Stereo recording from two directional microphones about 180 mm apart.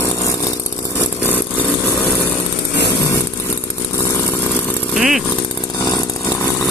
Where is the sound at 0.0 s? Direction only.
15° left (ahead or behind).